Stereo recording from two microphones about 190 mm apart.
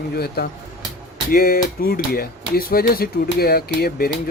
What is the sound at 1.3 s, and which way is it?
Speech, 50° left (ahead or behind).